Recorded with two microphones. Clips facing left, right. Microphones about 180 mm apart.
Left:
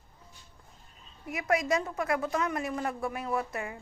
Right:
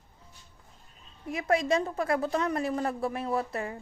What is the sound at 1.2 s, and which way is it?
A woman's voice, 30° right (ahead or behind).